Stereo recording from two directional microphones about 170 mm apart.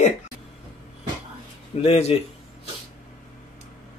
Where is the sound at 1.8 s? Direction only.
35° left (ahead or behind).